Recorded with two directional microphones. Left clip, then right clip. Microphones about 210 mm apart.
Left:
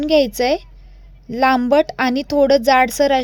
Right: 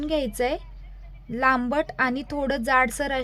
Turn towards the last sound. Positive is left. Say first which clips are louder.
# left 8 dB
turn(degrees=25)  # may be behind; listen again after turning